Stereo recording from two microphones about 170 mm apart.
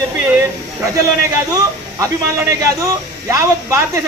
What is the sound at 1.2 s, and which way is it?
A man's voice, 20° right (ahead or behind).